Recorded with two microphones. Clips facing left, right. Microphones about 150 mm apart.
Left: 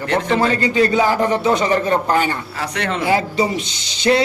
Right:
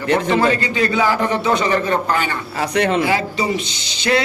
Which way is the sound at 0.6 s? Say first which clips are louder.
Left 3 dB; 40° left (ahead or behind).